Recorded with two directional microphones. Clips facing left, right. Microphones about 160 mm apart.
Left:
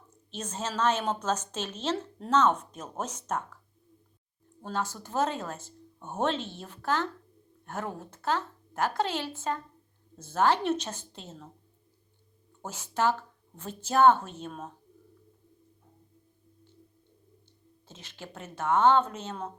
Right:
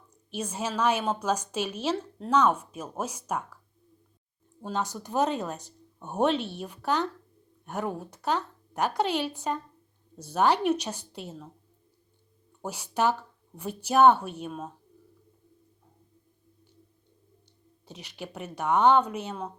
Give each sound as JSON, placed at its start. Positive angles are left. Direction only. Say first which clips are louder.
{"t": 0.1, "sound": "a sound", "louder": "right 4 dB", "side_deg": -10}
{"t": 0.8, "sound": "speech", "louder": "right 1 dB", "side_deg": -10}
{"t": 2.0, "sound": "speech", "louder": "right 2 dB", "side_deg": 0}
{"t": 2.3, "sound": "speech", "louder": "right 1 dB", "side_deg": -10}
{"t": 4.6, "sound": "speech", "louder": "right 2 dB", "side_deg": -15}
{"t": 12.6, "sound": "speech", "louder": "right 1 dB", "side_deg": -15}
{"t": 17.8, "sound": "speech", "louder": "right 5 dB", "side_deg": -15}